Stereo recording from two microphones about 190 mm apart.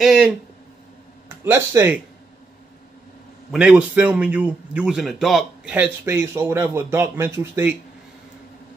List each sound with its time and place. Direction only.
0.0 s speech: centre (ahead or behind)
1.4 s a man's voice: 15° right (ahead or behind)
3.5 s a man's voice: 5° right (ahead or behind)